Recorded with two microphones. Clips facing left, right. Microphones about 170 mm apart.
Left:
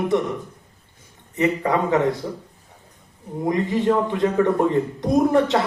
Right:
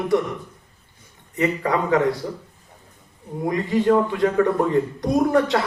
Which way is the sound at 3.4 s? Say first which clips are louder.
Right 1 dB; 20° left (ahead or behind).